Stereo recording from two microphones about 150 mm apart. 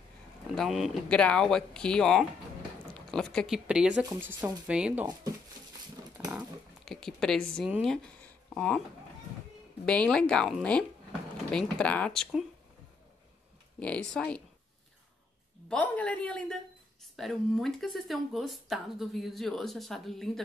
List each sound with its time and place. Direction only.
0.6 s speech: centre (ahead or behind)
5.0 s speech: 25° right (ahead or behind)
6.2 s speech: centre (ahead or behind)
9.8 s speech: 5° left (ahead or behind)
13.7 s a woman's voice: 5° left (ahead or behind)
15.7 s a woman's voice: 10° left (ahead or behind)